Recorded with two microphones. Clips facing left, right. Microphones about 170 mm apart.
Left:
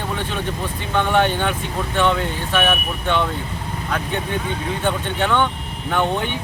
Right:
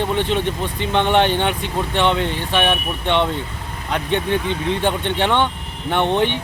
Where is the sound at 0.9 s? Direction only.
25° right (ahead or behind).